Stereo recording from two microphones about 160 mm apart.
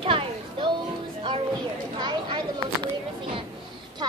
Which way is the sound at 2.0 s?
30° right (ahead or behind).